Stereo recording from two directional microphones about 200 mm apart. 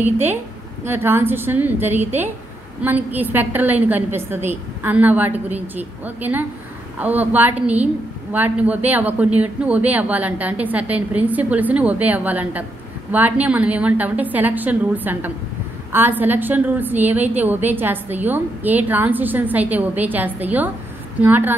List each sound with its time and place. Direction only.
0.0 s a woman's voice: 10° right (ahead or behind)